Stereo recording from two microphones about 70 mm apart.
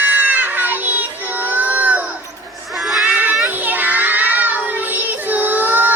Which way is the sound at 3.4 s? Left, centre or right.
Right.